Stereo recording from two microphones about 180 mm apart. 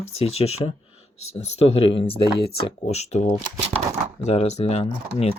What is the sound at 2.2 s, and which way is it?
Speech, 60° left (ahead or behind).